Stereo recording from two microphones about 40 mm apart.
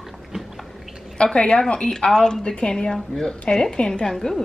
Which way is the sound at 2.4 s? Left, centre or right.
Left.